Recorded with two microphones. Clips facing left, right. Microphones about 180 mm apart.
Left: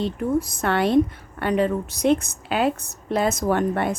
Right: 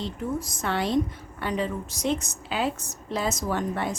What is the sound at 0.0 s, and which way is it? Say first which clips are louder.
A woman's voice: left 7 dB; 60° left (ahead or behind).